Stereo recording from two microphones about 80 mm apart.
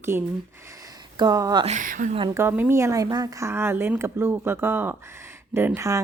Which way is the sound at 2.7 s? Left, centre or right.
Right.